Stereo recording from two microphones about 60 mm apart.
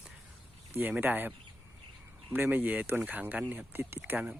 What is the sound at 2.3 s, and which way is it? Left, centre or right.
Speech, right.